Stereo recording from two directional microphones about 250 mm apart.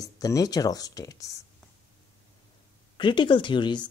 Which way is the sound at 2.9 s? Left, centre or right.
Centre.